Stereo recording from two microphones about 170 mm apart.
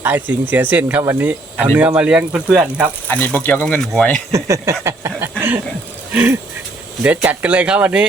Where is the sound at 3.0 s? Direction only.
10° left (ahead or behind).